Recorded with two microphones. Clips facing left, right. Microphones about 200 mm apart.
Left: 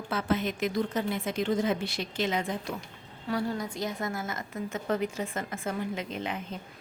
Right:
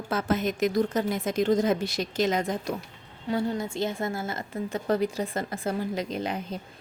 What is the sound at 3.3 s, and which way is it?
A woman's voice, 25° right (ahead or behind).